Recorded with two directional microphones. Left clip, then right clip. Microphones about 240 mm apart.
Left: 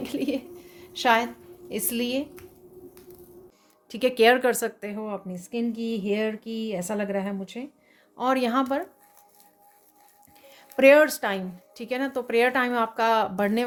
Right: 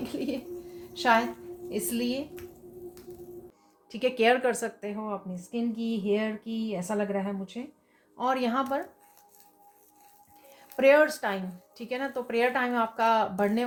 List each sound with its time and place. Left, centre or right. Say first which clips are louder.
0.0 s bird: left 4 dB; left
0.8 s a sound: left 2 dB; left
1.7 s speech: left 3 dB; left
3.8 s speech: left 5 dB; left
10.8 s speech: left 4 dB; left